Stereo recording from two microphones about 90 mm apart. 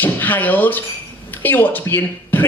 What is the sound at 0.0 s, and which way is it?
Speech, 20° left (ahead or behind).